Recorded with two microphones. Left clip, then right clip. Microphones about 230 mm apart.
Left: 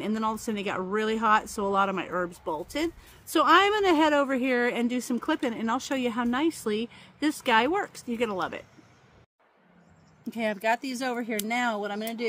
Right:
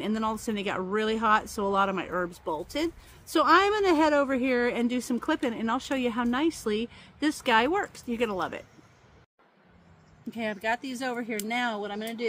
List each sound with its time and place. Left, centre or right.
0.0 s speech: centre
10.2 s speech: left